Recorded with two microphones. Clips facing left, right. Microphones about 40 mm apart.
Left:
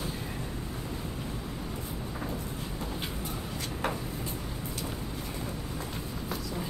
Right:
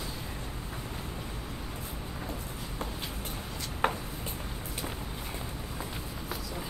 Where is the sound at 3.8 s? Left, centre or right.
Right.